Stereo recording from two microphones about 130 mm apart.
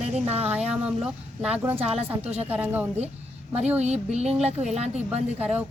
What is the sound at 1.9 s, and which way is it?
Music, 50° right (ahead or behind).